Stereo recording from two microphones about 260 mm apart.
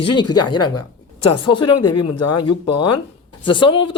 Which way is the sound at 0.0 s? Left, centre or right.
Centre.